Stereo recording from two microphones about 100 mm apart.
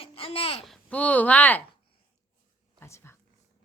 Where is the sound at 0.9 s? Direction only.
15° left (ahead or behind).